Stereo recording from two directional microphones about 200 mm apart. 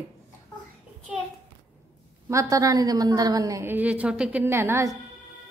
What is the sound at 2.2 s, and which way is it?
A woman's voice, 15° right (ahead or behind).